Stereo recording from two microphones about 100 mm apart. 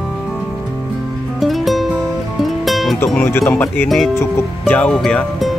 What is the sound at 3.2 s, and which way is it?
Speech, 25° left (ahead or behind).